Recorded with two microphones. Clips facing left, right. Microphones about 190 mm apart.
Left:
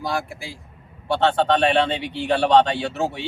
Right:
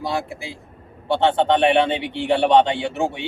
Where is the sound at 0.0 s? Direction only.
25° right (ahead or behind).